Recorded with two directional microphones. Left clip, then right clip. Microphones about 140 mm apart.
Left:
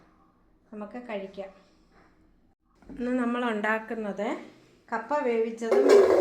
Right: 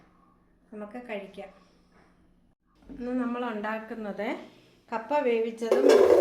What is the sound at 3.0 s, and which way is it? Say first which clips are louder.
Speech: left 3 dB; 75° left (ahead or behind).